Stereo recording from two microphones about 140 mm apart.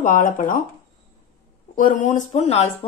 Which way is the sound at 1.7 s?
70° left (ahead or behind).